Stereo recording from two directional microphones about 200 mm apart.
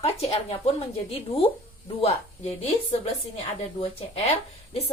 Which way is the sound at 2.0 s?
30° left (ahead or behind).